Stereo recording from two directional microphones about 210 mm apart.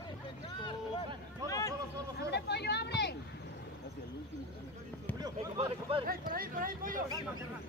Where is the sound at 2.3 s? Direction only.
50° left (ahead or behind).